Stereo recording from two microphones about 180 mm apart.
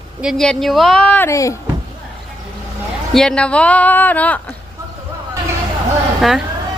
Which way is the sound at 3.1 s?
5° left (ahead or behind).